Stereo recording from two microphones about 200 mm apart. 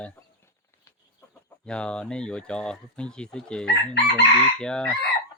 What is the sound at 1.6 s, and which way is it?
Speech, 5° left (ahead or behind).